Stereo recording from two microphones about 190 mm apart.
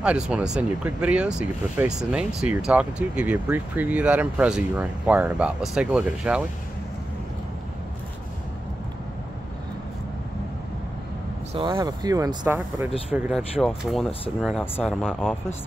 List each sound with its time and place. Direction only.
0.0 s speech: 5° right (ahead or behind)
11.5 s speech: 25° right (ahead or behind)
13.1 s speech: centre (ahead or behind)